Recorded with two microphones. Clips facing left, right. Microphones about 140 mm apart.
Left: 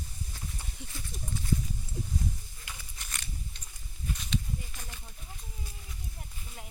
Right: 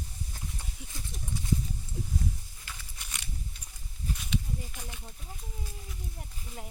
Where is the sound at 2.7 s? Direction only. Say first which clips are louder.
Even; 15° left (ahead or behind).